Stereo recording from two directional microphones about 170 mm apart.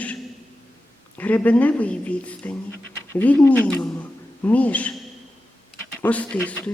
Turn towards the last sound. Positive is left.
turn(degrees=10)  # may be behind; listen again after turning